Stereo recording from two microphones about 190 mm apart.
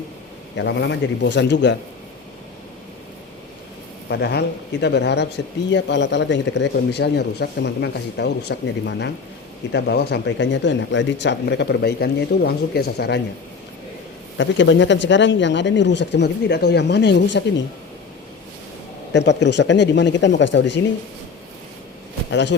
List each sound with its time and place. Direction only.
0.5 s speech: 70° left (ahead or behind)
4.1 s speech: 60° left (ahead or behind)
14.3 s speech: 75° left (ahead or behind)
19.1 s speech: 65° left (ahead or behind)
22.3 s speech: 65° left (ahead or behind)